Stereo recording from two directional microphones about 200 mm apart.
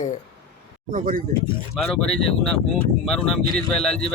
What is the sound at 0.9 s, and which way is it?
Speech, 40° right (ahead or behind).